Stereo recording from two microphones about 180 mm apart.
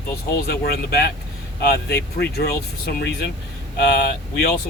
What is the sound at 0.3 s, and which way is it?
Speech, 65° left (ahead or behind).